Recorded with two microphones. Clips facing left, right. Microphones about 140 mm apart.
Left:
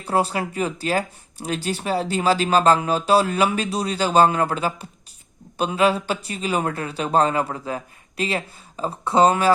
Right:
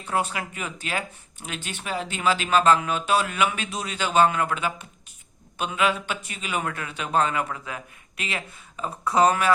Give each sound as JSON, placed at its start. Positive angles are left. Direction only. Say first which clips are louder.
{"t": 0.0, "sound": "speech", "louder": "left 5 dB", "side_deg": 35}